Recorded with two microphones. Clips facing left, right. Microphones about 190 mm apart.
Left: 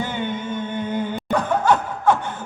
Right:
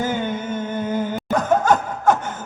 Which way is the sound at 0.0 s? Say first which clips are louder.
Right 3 dB; 45° right (ahead or behind).